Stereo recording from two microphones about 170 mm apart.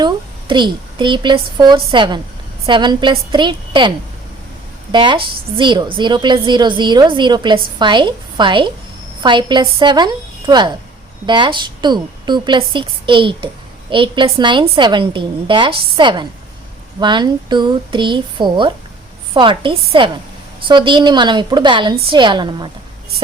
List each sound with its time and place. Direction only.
0.0 s a woman's voice: 25° right (ahead or behind)